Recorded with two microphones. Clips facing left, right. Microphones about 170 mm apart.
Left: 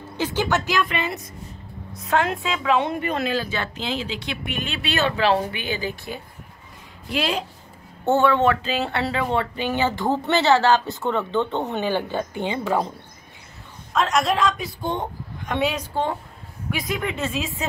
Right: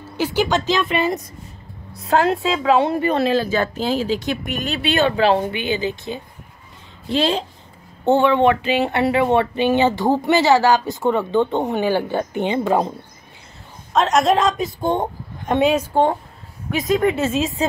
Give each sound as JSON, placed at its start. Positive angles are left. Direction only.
{"t": 0.2, "sound": "speech", "side_deg": -10}
{"t": 0.7, "sound": "a woman's voice", "side_deg": -25}
{"t": 0.9, "sound": "a woman's voice", "side_deg": -40}
{"t": 8.0, "sound": "speech", "side_deg": -15}
{"t": 13.9, "sound": "a woman's voice", "side_deg": -45}